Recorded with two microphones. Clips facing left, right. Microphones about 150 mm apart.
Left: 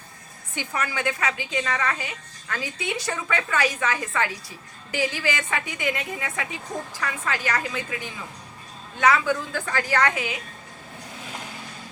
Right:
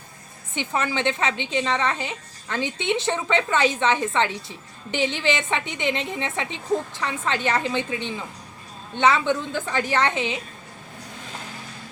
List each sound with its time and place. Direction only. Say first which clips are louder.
0.5 s a woman's voice: right 4 dB; 20° right (ahead or behind)